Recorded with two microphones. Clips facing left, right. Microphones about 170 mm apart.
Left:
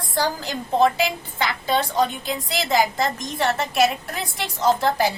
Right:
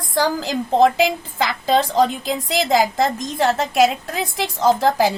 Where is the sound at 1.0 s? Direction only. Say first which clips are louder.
Right 4 dB; 90° right.